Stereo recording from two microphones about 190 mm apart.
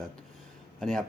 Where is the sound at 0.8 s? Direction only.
Centre (ahead or behind).